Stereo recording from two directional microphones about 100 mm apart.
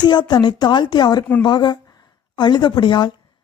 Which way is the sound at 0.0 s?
45° left (ahead or behind).